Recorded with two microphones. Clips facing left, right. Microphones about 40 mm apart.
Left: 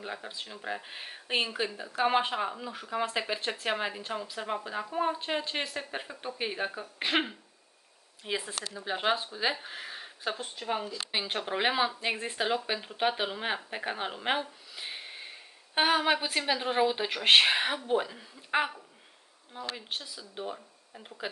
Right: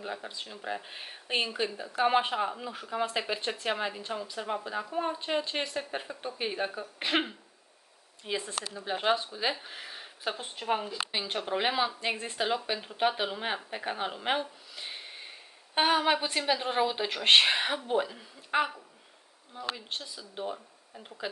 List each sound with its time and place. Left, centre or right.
0.0 s speech: centre
10.4 s speech: right
11.4 s speech: centre
19.5 s speech: centre
19.9 s speech: centre